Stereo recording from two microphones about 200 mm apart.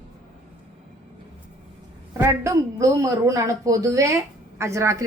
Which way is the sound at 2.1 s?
15° right (ahead or behind).